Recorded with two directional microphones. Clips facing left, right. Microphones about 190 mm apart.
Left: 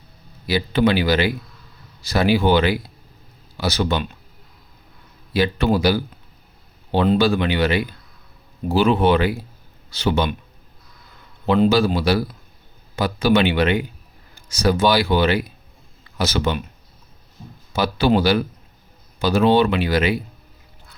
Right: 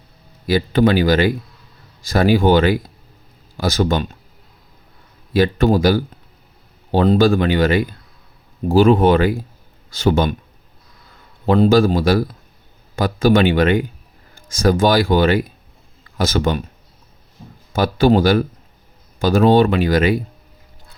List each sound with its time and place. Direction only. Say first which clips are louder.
0.4 s speech: right 3 dB; 45° right (ahead or behind)
5.3 s speech: right 4 dB; 45° right (ahead or behind)
11.4 s speech: right 3 dB; 40° right (ahead or behind)
17.7 s speech: right 4 dB; 50° right (ahead or behind)